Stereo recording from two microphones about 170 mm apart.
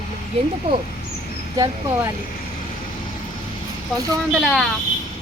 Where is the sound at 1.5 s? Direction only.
20° right (ahead or behind).